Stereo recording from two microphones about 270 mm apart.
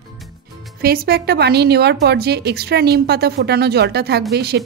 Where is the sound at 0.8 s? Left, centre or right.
Right.